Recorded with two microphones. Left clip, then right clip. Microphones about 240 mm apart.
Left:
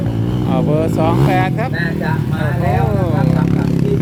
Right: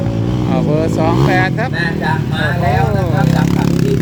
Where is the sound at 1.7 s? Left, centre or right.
Right.